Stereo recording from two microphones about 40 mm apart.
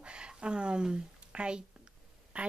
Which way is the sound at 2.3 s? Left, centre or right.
Right.